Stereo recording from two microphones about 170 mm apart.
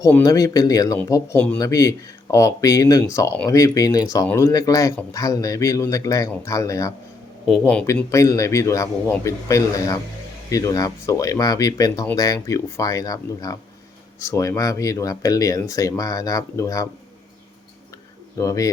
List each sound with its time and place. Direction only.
0.0 s a man's voice: 20° left (ahead or behind)
7.4 s a man's voice: 5° left (ahead or behind)
8.1 s a man's voice: 20° left (ahead or behind)
18.3 s speech: 20° left (ahead or behind)